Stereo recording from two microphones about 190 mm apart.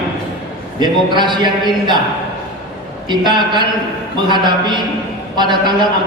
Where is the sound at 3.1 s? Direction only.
25° right (ahead or behind).